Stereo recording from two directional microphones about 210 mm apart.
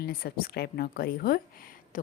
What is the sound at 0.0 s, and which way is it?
A woman's voice, 45° left (ahead or behind).